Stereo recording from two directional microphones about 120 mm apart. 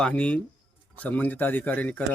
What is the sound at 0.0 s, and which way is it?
Speech, 10° left (ahead or behind).